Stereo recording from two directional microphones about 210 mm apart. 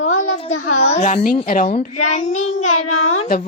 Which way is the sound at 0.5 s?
90° left.